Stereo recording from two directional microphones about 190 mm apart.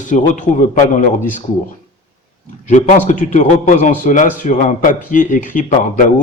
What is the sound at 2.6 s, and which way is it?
A man's voice, 40° left (ahead or behind).